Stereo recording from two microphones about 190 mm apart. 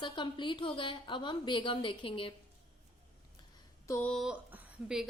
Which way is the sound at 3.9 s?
10° left (ahead or behind).